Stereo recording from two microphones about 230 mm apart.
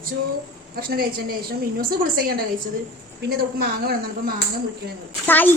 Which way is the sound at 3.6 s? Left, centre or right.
Right.